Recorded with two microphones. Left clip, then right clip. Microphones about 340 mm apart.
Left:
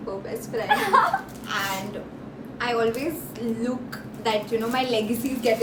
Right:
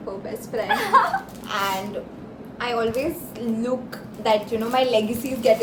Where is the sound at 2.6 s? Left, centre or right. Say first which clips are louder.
Even; centre.